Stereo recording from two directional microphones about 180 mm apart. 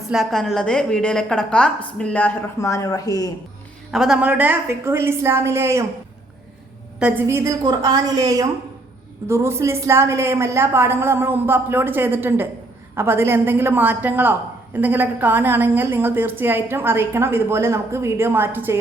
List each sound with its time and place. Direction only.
0.1 s a woman's voice: centre (ahead or behind); by 3.3 s 20° left (ahead or behind)
3.9 s a woman's voice: centre (ahead or behind)
7.0 s a woman's voice: 10° right (ahead or behind)